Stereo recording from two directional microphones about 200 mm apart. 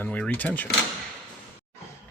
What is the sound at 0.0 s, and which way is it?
Speech, 5° left (ahead or behind).